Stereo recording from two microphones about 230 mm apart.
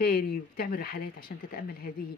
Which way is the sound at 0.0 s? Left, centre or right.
Left.